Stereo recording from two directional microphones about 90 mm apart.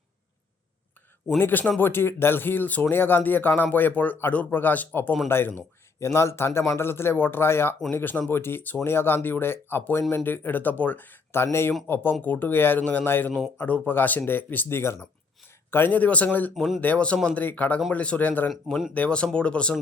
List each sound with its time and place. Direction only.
1.4 s speech: 20° left (ahead or behind)
16.6 s speech: centre (ahead or behind)
16.8 s speech: 15° left (ahead or behind)
18.4 s speech: centre (ahead or behind)
18.9 s speech: 10° left (ahead or behind)